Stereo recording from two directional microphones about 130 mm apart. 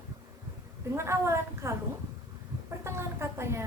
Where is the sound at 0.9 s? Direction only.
20° right (ahead or behind).